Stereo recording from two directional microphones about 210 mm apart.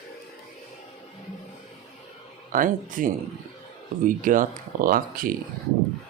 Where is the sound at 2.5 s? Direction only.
40° right (ahead or behind).